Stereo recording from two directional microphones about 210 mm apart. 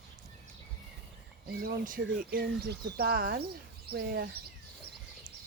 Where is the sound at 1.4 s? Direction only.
45° right (ahead or behind).